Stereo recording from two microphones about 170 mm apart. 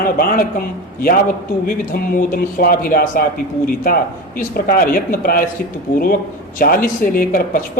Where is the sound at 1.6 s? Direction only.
55° left (ahead or behind).